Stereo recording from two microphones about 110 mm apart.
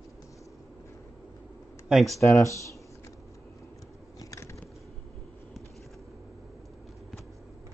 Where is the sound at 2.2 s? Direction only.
30° left (ahead or behind).